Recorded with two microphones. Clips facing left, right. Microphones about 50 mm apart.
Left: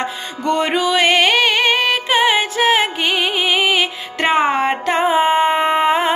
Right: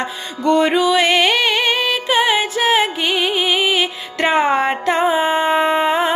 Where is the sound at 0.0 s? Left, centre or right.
Left.